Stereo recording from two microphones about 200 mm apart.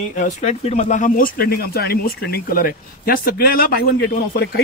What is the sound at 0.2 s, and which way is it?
Speech, 35° left (ahead or behind).